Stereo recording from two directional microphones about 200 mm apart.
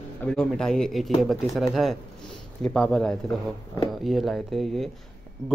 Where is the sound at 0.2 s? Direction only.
5° left (ahead or behind).